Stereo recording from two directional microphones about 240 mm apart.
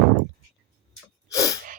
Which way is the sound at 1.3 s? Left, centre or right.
Centre.